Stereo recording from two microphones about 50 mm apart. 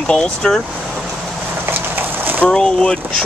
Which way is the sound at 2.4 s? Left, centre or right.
Centre.